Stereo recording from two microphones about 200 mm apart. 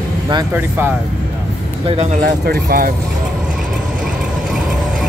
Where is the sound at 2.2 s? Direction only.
50° right (ahead or behind).